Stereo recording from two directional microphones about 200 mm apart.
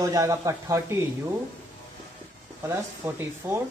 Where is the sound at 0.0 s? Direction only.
15° right (ahead or behind).